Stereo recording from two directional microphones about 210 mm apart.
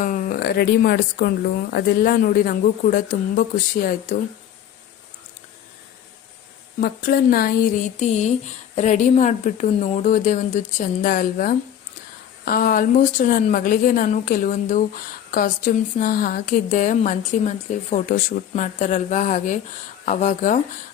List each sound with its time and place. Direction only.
0.0 s speech: 40° left (ahead or behind)
6.8 s a woman's voice: 45° left (ahead or behind)